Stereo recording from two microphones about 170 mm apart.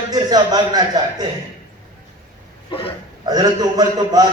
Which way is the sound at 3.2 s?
25° right (ahead or behind).